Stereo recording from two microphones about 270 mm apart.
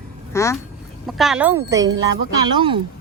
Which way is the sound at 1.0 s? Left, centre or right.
Centre.